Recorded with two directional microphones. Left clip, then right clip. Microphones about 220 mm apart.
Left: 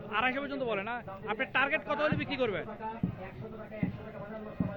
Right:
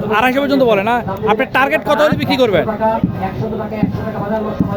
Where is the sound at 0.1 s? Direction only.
15° right (ahead or behind).